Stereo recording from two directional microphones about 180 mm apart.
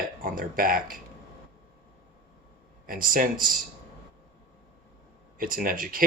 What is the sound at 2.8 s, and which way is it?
Speech, 50° right (ahead or behind).